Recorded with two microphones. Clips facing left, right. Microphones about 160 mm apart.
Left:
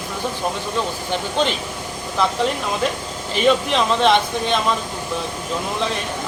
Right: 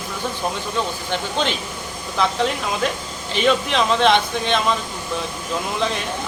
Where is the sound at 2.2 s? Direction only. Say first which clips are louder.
Even; centre (ahead or behind).